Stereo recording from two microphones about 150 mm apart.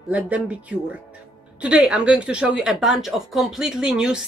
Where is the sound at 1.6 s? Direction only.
5° right (ahead or behind).